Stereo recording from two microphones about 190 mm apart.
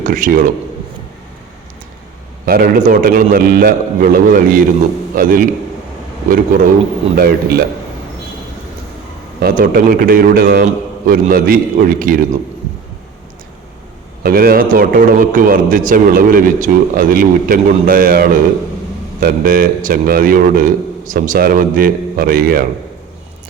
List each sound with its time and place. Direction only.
0.0 s a man's voice: 45° right (ahead or behind)
2.5 s a man's voice: 50° right (ahead or behind)
9.4 s a man's voice: 50° right (ahead or behind)
14.3 s a man's voice: 50° right (ahead or behind)